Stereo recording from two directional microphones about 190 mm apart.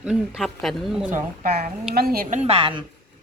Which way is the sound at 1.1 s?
45° right (ahead or behind).